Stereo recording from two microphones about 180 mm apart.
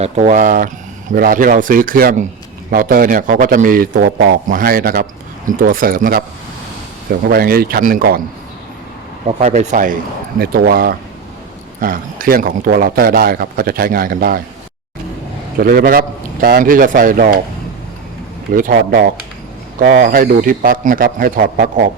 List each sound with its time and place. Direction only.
0.0 s a man's voice: 40° right (ahead or behind)
9.2 s a man's voice: 40° right (ahead or behind); by 14.4 s 55° right (ahead or behind)
15.5 s a man's voice: 55° right (ahead or behind)
18.5 s a man's voice: 50° right (ahead or behind)